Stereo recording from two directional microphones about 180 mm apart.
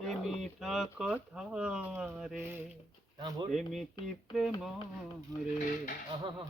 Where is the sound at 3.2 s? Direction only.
25° right (ahead or behind).